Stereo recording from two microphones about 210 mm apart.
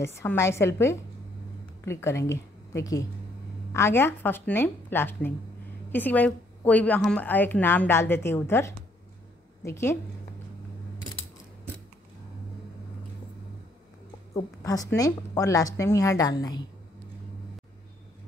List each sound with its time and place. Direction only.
0.0 s a woman's voice: 10° left (ahead or behind)
14.3 s a woman's voice: 15° left (ahead or behind)